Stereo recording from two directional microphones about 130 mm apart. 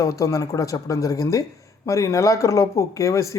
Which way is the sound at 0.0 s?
25° left (ahead or behind).